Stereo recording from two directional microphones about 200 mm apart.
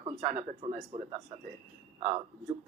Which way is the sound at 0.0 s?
35° right (ahead or behind).